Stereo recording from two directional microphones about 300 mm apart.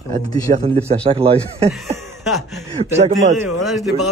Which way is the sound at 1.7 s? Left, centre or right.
Centre.